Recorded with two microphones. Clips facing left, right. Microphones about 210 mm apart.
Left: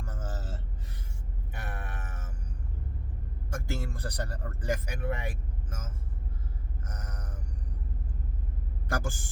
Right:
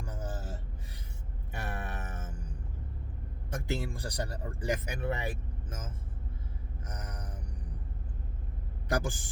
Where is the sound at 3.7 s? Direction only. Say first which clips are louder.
Right 2 dB; 15° right (ahead or behind).